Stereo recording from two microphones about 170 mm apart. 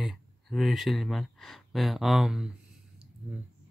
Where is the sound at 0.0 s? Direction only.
Centre (ahead or behind).